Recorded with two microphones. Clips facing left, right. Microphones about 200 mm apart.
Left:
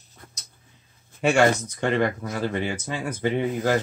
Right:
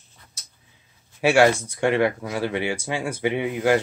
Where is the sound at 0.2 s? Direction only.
50° left (ahead or behind).